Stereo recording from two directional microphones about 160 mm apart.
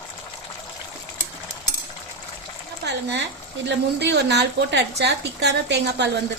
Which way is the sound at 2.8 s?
90° right.